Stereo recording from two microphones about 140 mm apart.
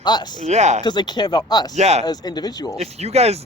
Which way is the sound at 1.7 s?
50° right (ahead or behind).